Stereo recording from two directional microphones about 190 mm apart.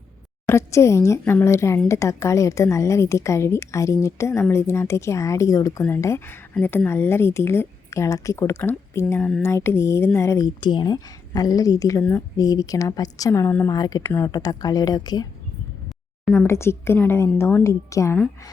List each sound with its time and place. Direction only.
0.4 s a woman's voice: 15° left (ahead or behind)
16.3 s a woman's voice: 15° left (ahead or behind)